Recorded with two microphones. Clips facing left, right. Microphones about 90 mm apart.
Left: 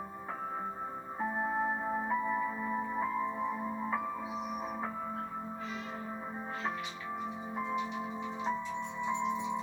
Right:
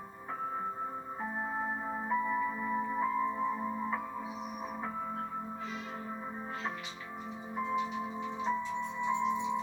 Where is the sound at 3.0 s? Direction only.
5° left (ahead or behind).